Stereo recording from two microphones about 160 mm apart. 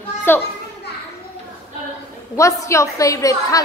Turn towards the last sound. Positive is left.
turn(degrees=20)  # may be behind; listen again after turning